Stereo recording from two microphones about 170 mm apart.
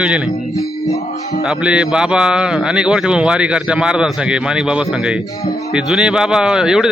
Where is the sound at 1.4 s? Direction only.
5° right (ahead or behind).